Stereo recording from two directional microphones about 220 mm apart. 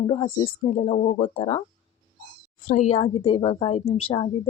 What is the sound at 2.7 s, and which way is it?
Speech, 30° left (ahead or behind).